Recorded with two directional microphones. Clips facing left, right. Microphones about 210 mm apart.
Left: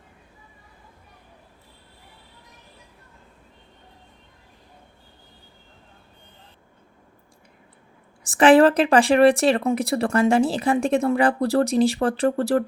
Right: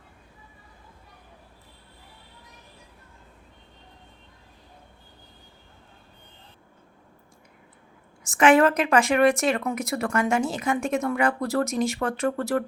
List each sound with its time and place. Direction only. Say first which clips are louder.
8.2 s speech: left 4 dB; 35° left (ahead or behind)